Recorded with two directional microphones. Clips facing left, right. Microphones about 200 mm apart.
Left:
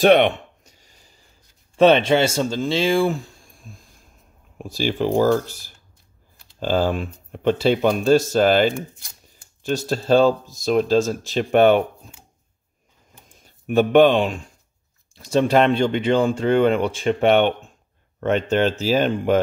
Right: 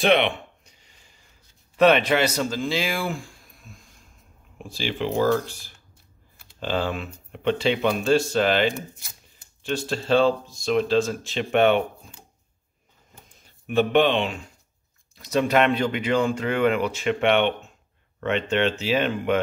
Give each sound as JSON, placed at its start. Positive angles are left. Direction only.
{"t": 0.0, "sound": "a sound", "side_deg": 45}
{"t": 1.8, "sound": "speech", "side_deg": 30}
{"t": 3.2, "sound": "a sound", "side_deg": 25}
{"t": 4.6, "sound": "speech", "side_deg": 45}
{"t": 6.6, "sound": "speech", "side_deg": 40}
{"t": 13.7, "sound": "speech", "side_deg": 45}
{"t": 15.1, "sound": "speech", "side_deg": 30}